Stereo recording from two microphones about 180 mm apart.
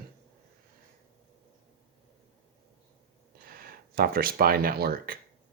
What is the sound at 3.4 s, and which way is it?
Speech, 55° right (ahead or behind).